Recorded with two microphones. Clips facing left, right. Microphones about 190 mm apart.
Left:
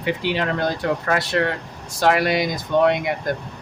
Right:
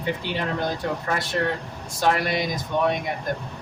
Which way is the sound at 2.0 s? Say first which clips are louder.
Left 4 dB; 85° left.